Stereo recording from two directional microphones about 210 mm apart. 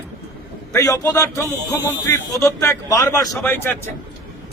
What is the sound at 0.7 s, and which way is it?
Speech, 15° left (ahead or behind).